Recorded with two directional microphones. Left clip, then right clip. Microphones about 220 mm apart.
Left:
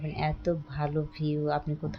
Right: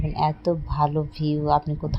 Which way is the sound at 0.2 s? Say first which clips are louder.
Right 7 dB; 15° right (ahead or behind).